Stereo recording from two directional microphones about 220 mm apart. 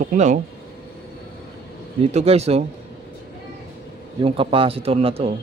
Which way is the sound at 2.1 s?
30° right (ahead or behind).